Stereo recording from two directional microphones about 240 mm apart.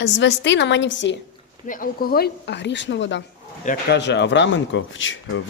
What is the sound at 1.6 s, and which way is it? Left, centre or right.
Speech, left.